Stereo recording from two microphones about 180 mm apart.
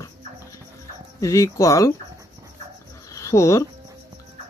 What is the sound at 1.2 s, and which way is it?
Speech, 15° left (ahead or behind).